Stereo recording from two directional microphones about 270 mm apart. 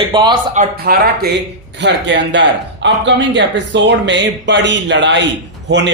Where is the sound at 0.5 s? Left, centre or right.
Right.